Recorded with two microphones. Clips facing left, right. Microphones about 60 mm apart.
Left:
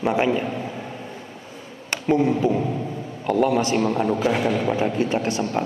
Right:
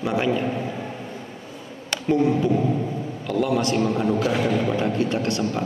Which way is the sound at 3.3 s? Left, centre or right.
Left.